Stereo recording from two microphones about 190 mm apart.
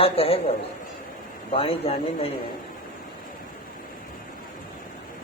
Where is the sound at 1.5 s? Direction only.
30° left (ahead or behind).